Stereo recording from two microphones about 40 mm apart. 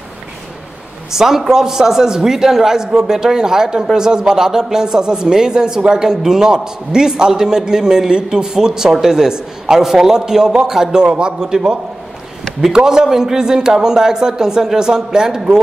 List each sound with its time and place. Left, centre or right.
1.1 s speech: centre